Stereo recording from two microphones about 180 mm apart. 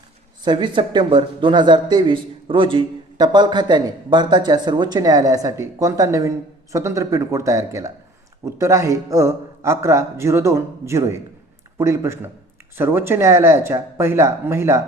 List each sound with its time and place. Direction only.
0.4 s a man's voice: 25° right (ahead or behind)